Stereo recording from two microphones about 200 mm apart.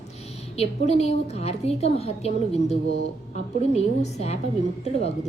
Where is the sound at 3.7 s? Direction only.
30° left (ahead or behind).